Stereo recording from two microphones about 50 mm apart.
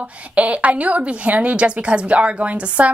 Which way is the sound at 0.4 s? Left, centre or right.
Right.